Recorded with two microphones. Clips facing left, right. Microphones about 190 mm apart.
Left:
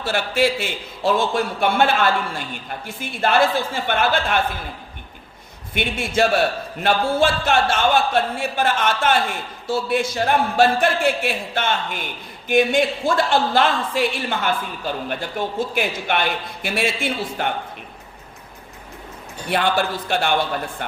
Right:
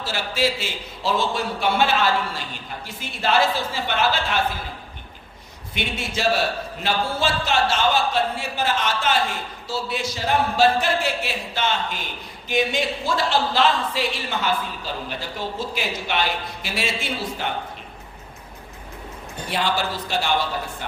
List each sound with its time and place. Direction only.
0.0 s a man's voice: 55° left (ahead or behind)
5.7 s a man's voice: 55° left (ahead or behind)
19.5 s a man's voice: 60° left (ahead or behind)